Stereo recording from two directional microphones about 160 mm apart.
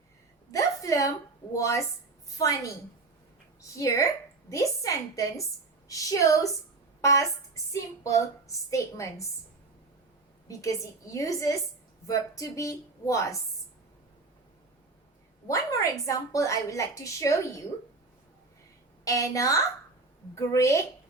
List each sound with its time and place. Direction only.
0.5 s a sound: 20° left (ahead or behind)
1.5 s a woman's voice: 20° left (ahead or behind)
10.5 s a woman's voice: 20° left (ahead or behind)
15.4 s a woman's voice: 20° left (ahead or behind)
19.0 s a woman's voice: 20° left (ahead or behind)